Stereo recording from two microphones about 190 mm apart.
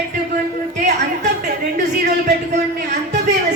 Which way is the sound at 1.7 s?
60° right (ahead or behind).